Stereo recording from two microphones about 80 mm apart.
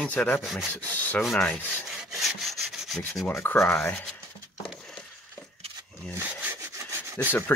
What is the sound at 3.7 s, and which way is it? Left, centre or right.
Speech, centre.